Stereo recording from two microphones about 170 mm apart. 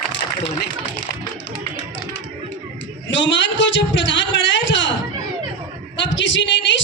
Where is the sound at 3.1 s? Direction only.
90° left.